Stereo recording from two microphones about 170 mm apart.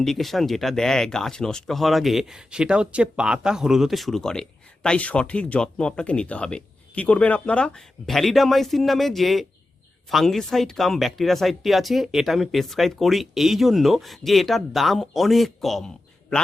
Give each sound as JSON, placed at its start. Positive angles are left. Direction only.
{"t": 0.0, "sound": "speech", "side_deg": 0}